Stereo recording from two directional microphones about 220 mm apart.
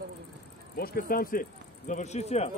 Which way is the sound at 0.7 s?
40° left (ahead or behind).